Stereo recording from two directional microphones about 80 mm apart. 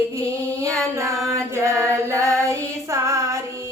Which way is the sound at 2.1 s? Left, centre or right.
Right.